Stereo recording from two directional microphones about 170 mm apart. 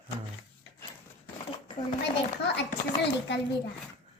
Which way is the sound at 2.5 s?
90° left.